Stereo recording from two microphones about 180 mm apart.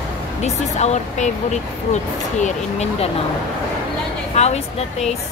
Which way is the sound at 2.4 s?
40° left (ahead or behind).